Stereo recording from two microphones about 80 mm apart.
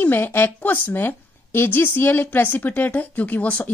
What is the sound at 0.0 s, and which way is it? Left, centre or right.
Speech, left.